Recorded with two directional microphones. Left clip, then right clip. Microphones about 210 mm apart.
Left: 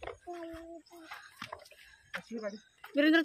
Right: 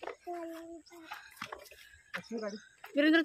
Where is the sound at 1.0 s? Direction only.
10° left (ahead or behind).